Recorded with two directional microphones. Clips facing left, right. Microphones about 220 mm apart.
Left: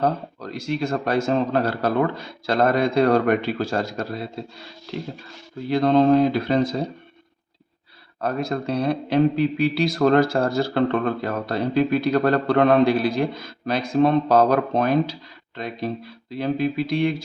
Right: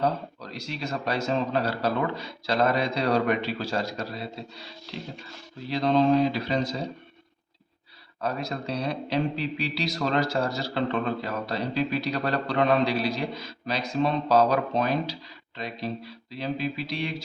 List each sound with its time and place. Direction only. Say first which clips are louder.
0.0 s speech: left 4 dB; 50° left (ahead or behind)
8.2 s speech: left 6 dB; 50° left (ahead or behind)